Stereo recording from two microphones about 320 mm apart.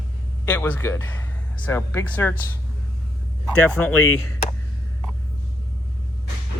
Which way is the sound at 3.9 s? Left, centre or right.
Left.